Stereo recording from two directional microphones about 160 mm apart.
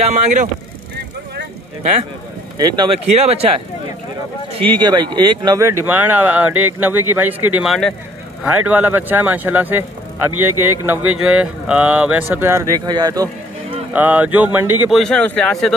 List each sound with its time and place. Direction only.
0.0 s speech: 45° right (ahead or behind)
2.5 s speech: 25° right (ahead or behind)
3.1 s speech: 40° right (ahead or behind)
4.6 s speech: 30° right (ahead or behind)
13.9 s speech: 10° right (ahead or behind)
14.9 s speech: 5° left (ahead or behind)